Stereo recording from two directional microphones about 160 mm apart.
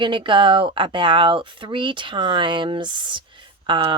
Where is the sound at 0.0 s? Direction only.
30° right (ahead or behind).